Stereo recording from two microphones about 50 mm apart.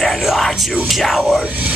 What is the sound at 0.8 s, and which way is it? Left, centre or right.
Whispering, centre.